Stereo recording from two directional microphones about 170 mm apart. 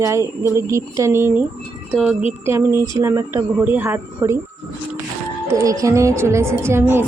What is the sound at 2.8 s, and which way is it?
A woman's voice, 15° right (ahead or behind).